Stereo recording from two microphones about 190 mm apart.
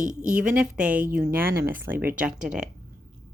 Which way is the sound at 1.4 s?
55° right (ahead or behind).